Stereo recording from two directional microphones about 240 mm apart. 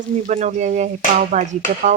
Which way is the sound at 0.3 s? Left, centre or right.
Right.